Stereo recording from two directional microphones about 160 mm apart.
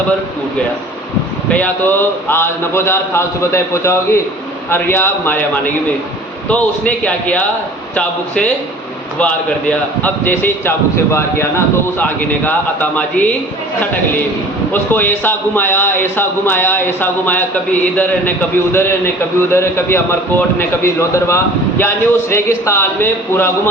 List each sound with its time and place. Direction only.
1.5 s a man's voice: 10° left (ahead or behind)
9.1 s a man's voice: 10° left (ahead or behind)
14.7 s a man's voice: 10° left (ahead or behind)